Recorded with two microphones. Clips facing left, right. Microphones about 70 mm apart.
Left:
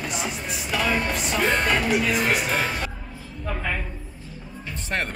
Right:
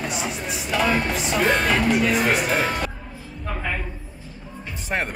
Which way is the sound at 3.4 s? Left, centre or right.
Centre.